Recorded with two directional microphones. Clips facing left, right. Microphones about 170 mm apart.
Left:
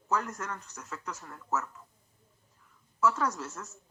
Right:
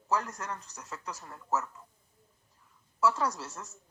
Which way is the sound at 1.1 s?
25° right (ahead or behind).